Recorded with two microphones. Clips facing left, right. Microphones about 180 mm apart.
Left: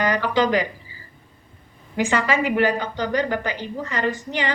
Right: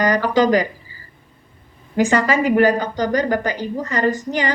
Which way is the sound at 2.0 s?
40° right (ahead or behind).